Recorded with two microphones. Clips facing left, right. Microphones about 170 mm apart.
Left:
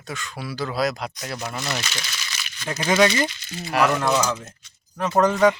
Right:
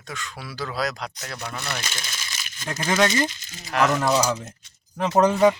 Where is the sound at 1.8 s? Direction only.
50° right (ahead or behind).